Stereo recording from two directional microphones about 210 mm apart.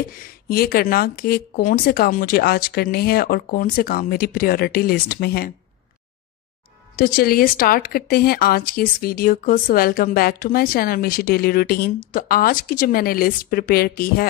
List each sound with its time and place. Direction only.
0.1 s speech: 45° left (ahead or behind)
7.0 s speech: 45° left (ahead or behind)